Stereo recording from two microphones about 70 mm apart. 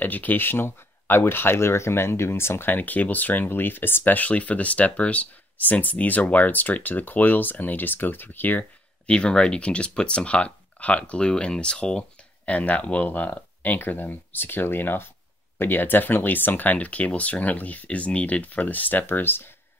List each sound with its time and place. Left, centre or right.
0.0 s speech: left